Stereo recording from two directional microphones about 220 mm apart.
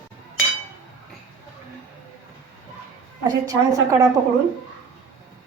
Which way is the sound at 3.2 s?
15° right (ahead or behind).